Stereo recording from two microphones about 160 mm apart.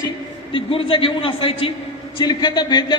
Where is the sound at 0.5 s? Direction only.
35° left (ahead or behind).